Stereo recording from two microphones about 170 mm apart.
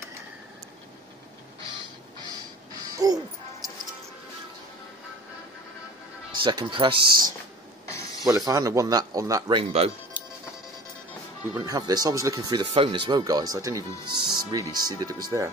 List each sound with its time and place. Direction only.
3.0 s speech: 20° right (ahead or behind)
6.4 s speech: 30° right (ahead or behind)
7.9 s a sound: 20° left (ahead or behind)
8.3 s speech: 20° right (ahead or behind)
9.6 s speech: 35° right (ahead or behind)
11.6 s speech: 25° right (ahead or behind)